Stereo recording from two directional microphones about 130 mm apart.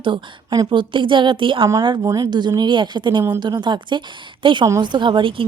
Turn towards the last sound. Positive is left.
turn(degrees=-40)  # may be behind; listen again after turning